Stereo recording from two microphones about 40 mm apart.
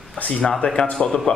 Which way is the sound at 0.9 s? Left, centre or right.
Centre.